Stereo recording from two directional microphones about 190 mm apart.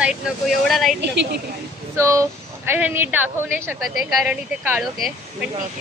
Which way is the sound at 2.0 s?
15° right (ahead or behind).